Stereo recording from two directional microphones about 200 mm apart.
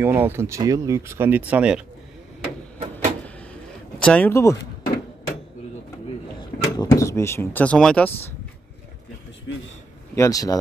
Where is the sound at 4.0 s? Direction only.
5° left (ahead or behind).